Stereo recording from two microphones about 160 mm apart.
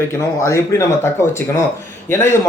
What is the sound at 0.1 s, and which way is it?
A man's voice, 20° left (ahead or behind).